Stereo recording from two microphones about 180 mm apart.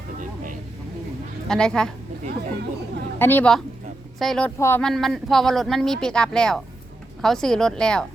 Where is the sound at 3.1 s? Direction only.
10° left (ahead or behind).